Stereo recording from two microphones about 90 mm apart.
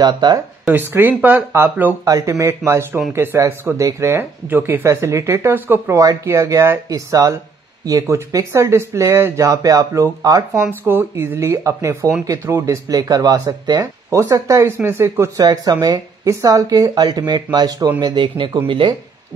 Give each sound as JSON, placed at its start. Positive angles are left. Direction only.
{"t": 0.0, "sound": "speech", "side_deg": -50}
{"t": 0.7, "sound": "speech", "side_deg": -25}
{"t": 2.0, "sound": "speech", "side_deg": -40}
{"t": 4.8, "sound": "speech", "side_deg": -35}
{"t": 5.9, "sound": "speech", "side_deg": -35}
{"t": 10.9, "sound": "speech", "side_deg": -25}
{"t": 14.6, "sound": "speech", "side_deg": -25}
{"t": 15.4, "sound": "speech", "side_deg": -45}
{"t": 18.0, "sound": "speech", "side_deg": -60}